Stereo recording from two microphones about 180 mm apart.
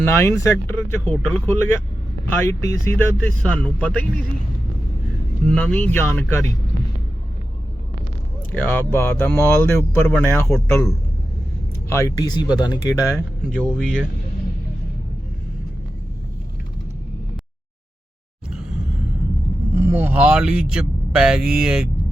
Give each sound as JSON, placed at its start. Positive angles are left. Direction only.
{"t": 0.0, "sound": "speech", "side_deg": 15}
{"t": 5.5, "sound": "speech", "side_deg": 5}
{"t": 8.5, "sound": "speech", "side_deg": 10}
{"t": 13.6, "sound": "speech", "side_deg": 5}
{"t": 19.7, "sound": "speech", "side_deg": -10}